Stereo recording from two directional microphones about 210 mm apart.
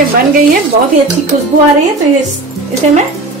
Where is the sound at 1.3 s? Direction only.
40° right (ahead or behind).